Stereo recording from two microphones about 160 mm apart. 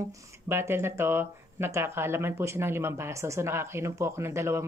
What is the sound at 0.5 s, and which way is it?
Speech, 15° right (ahead or behind).